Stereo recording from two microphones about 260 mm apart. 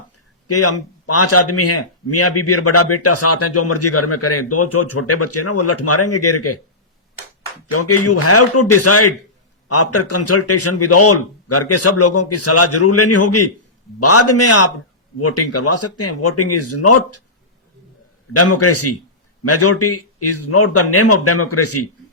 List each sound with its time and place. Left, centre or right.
0.4 s speech: left
7.7 s speech: left
18.3 s speech: left